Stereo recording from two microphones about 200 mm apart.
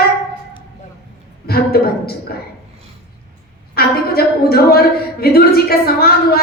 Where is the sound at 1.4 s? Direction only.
50° left (ahead or behind).